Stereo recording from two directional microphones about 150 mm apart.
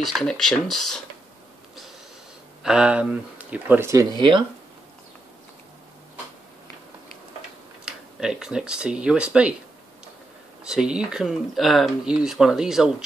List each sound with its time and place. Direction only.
0.0 s speech: centre (ahead or behind)
2.6 s speech: 5° right (ahead or behind)
4.2 s speech: 30° right (ahead or behind)
7.8 s speech: 5° right (ahead or behind)
10.6 s speech: 5° right (ahead or behind)